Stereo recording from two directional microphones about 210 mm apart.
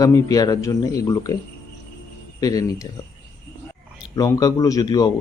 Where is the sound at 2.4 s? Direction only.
15° left (ahead or behind).